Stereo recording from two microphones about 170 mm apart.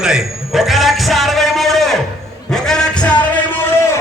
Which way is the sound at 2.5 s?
5° left (ahead or behind).